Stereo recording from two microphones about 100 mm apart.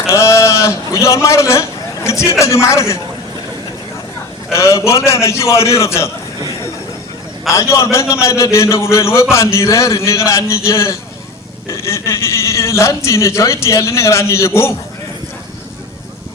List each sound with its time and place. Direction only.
0.1 s a man's voice: 30° left (ahead or behind)
4.5 s a man's voice: 30° left (ahead or behind)
7.5 s a man's voice: 30° left (ahead or behind)